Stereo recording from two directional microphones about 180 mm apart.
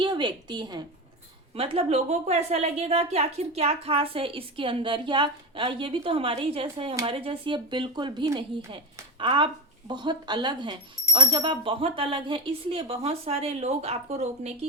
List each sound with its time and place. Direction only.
0.0 s a woman's voice: 25° right (ahead or behind)